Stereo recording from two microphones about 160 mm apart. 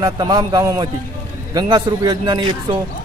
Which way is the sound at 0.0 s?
25° right (ahead or behind).